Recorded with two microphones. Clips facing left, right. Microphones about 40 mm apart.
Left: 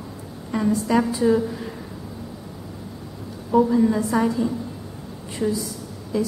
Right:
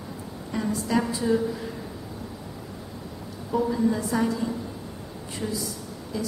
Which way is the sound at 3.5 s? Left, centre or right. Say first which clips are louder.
Left 6 dB; centre.